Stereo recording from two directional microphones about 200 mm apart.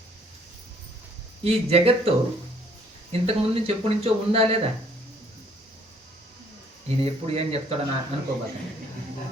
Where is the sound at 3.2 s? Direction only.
30° right (ahead or behind).